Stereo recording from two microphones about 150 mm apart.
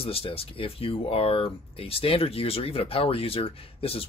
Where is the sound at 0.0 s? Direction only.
40° left (ahead or behind).